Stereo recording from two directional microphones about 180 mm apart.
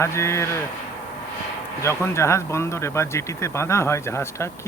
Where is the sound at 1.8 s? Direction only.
15° left (ahead or behind).